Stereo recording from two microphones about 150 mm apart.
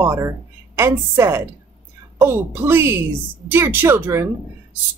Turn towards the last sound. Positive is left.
turn(degrees=-15)  # may be behind; listen again after turning